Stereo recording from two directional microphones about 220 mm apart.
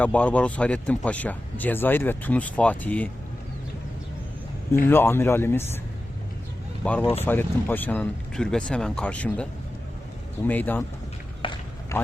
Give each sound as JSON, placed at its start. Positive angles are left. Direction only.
{"t": 0.0, "sound": "speech", "side_deg": 5}
{"t": 4.9, "sound": "speech", "side_deg": 10}
{"t": 6.8, "sound": "speech", "side_deg": 10}
{"t": 11.4, "sound": "run", "side_deg": 25}